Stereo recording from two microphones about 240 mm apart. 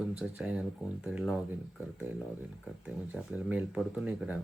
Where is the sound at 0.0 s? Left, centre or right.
Centre.